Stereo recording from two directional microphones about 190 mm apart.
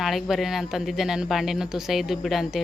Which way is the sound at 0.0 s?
Centre (ahead or behind).